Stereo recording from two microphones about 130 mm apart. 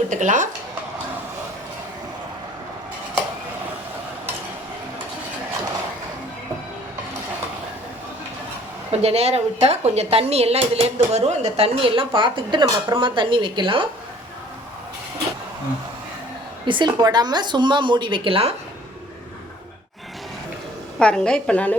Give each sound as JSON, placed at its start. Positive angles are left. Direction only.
{"t": 0.1, "sound": "speech", "side_deg": -75}
{"t": 8.9, "sound": "speech", "side_deg": -55}
{"t": 16.6, "sound": "a woman's voice", "side_deg": -35}
{"t": 21.0, "sound": "a woman's voice", "side_deg": 5}